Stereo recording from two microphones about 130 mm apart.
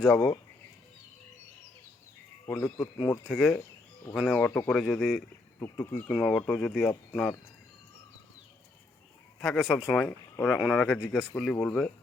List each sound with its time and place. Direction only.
0.0 s speech: 10° left (ahead or behind)
2.5 s speech: 10° left (ahead or behind)
4.4 s speech: 15° left (ahead or behind)
5.5 s speech: 20° left (ahead or behind); by 7.3 s centre (ahead or behind)
9.4 s speech: centre (ahead or behind)
10.1 s speech: 15° left (ahead or behind)